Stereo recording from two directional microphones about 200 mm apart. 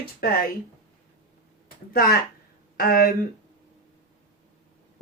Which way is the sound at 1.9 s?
50° left (ahead or behind).